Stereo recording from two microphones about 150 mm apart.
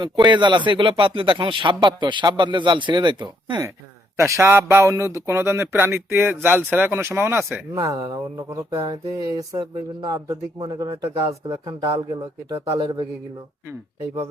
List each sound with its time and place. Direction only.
0.0 s speech: 30° right (ahead or behind)
4.2 s speech: 15° right (ahead or behind)
7.9 s a sound: 25° right (ahead or behind)
11.4 s speech: 35° right (ahead or behind)
12.5 s a sound: 20° right (ahead or behind)
12.7 s speech: 30° right (ahead or behind)